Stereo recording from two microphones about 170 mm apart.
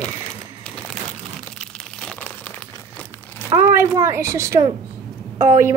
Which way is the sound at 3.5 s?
15° right (ahead or behind).